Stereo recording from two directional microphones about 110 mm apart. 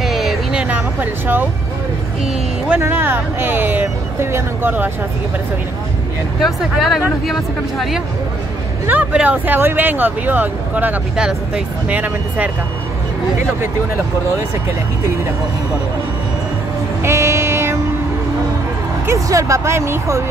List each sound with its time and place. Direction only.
0.0 s a sound: centre (ahead or behind)
1.2 s speech: 15° right (ahead or behind)
2.8 s speech: 20° right (ahead or behind)
6.4 s speech: centre (ahead or behind)
8.8 s speech: 15° right (ahead or behind)
17.0 s vehicle: 25° right (ahead or behind)
19.0 s speech: 30° right (ahead or behind)